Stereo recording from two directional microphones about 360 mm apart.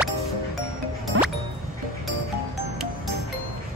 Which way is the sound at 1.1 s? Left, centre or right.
Right.